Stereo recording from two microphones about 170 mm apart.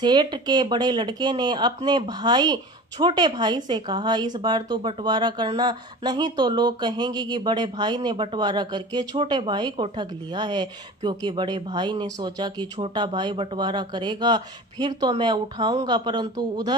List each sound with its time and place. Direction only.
0.0 s speech: 25° right (ahead or behind)